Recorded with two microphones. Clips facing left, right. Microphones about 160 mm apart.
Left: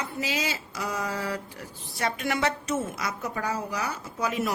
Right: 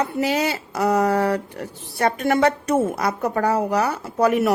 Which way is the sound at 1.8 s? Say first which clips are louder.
Right 8 dB; 55° right (ahead or behind).